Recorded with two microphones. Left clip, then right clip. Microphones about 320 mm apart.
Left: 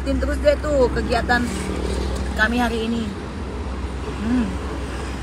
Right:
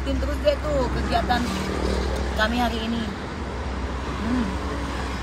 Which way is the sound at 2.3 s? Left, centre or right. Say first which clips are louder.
Left 4 dB; centre.